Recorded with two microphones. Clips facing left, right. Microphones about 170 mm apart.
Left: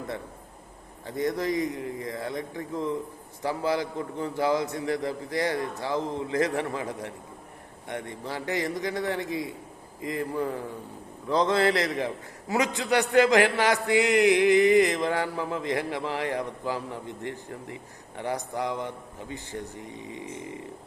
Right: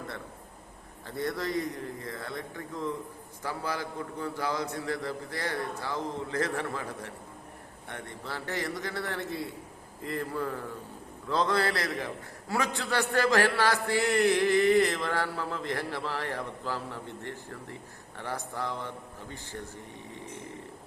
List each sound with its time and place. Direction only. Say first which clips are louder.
1.0 s a man's voice: left 5 dB; 15° left (ahead or behind)